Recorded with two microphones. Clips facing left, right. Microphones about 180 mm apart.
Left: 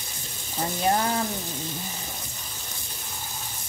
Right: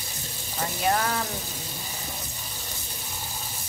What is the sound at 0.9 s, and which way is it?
Speech, 25° left (ahead or behind).